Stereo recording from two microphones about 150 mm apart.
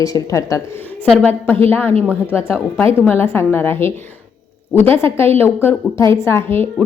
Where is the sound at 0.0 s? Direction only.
20° left (ahead or behind).